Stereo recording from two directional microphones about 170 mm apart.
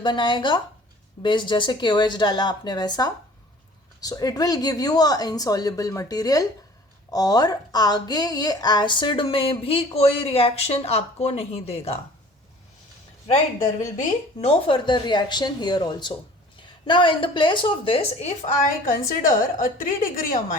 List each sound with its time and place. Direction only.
0.0 s a woman's voice: 30° left (ahead or behind)
14.4 s speech: 30° left (ahead or behind)
18.9 s a woman's voice: 55° left (ahead or behind)